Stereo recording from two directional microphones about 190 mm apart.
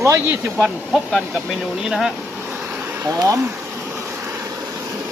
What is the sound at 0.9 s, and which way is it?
Speech, centre (ahead or behind).